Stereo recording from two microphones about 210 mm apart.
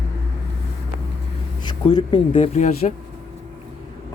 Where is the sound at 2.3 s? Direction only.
35° left (ahead or behind).